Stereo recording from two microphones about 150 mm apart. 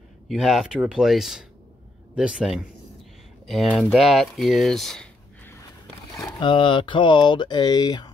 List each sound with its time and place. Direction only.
0.3 s speech: centre (ahead or behind)
6.1 s speech: 30° left (ahead or behind)